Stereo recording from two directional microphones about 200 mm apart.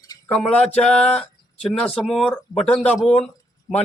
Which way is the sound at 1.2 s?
5° left (ahead or behind).